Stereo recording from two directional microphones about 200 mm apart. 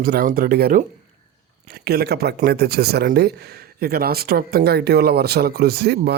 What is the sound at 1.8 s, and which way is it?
Speech, 55° right (ahead or behind).